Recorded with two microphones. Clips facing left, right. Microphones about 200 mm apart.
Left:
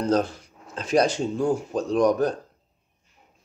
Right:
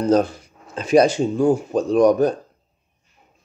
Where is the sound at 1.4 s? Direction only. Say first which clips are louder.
Right 6 dB; 60° right (ahead or behind).